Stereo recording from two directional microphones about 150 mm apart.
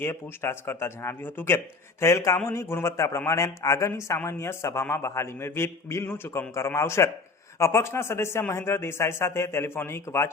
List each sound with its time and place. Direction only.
0.0 s a man's voice: 15° left (ahead or behind)